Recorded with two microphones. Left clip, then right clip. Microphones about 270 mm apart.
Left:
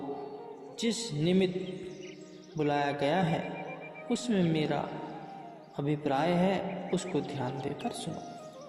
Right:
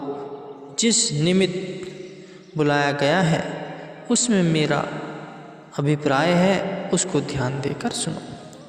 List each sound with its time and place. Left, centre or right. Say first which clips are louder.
0.8 s a man's voice: right 12 dB; right
2.6 s a man's voice: right 10 dB; right